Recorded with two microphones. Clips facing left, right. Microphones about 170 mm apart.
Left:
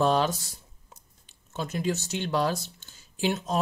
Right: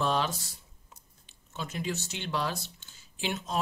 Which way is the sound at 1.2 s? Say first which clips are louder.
Left 5 dB; 40° left (ahead or behind).